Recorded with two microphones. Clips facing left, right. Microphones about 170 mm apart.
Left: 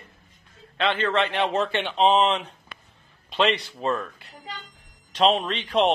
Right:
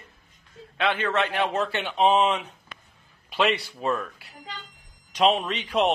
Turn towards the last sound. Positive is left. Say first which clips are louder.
# left 2 dB
turn(degrees=-10)  # may be behind; listen again after turning